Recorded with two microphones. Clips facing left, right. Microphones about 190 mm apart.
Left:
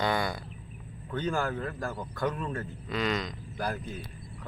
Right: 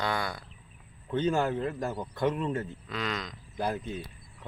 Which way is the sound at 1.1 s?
25° right (ahead or behind).